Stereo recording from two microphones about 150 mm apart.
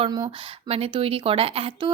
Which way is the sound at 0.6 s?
40° right (ahead or behind).